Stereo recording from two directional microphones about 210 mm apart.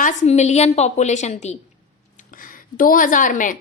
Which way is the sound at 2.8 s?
40° left (ahead or behind).